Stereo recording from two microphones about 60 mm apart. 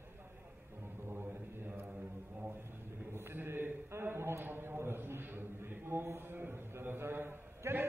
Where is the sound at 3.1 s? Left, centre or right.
Right.